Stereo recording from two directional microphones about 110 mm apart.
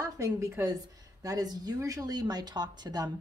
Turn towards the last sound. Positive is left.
turn(degrees=-35)  # may be behind; listen again after turning